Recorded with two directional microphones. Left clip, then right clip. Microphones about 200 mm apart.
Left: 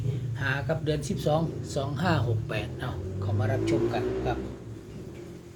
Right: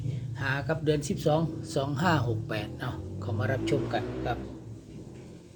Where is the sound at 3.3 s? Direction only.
45° right (ahead or behind).